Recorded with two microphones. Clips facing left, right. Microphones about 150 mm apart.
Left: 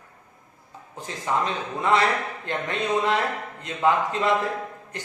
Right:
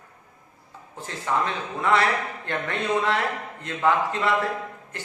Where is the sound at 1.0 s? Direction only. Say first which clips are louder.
Even; 15° left (ahead or behind).